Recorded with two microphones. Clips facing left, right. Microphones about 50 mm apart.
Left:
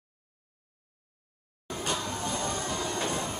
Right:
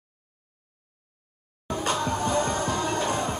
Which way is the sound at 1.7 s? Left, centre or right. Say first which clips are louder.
Right 6 dB; right.